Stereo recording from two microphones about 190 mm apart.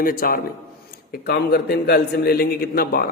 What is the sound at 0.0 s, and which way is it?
A man's voice, 50° left (ahead or behind).